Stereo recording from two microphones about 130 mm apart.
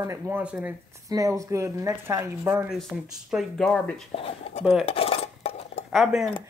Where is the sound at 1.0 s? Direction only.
25° right (ahead or behind).